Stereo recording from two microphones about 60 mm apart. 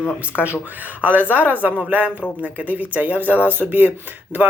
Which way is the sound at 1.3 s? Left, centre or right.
Right.